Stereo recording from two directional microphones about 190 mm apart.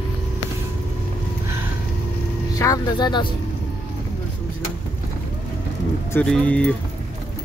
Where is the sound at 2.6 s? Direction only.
20° left (ahead or behind).